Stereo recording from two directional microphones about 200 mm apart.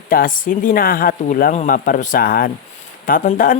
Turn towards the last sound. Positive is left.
turn(degrees=45)  # may be behind; listen again after turning